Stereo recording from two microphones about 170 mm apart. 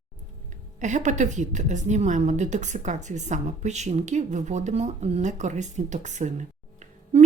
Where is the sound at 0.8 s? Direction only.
45° right (ahead or behind).